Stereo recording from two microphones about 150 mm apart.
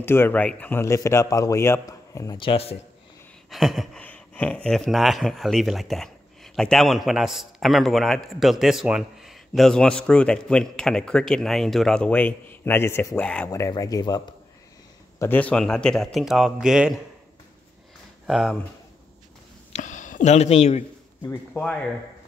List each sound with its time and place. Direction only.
0.0 s a man's voice: 15° left (ahead or behind)
2.3 s a man's voice: 35° left (ahead or behind)
3.4 s speech: centre (ahead or behind)
13.5 s speech: 20° left (ahead or behind)
15.1 s speech: 10° left (ahead or behind); by 17.0 s 5° right (ahead or behind)
18.2 s speech: 5° right (ahead or behind)
19.7 s speech: 55° left (ahead or behind)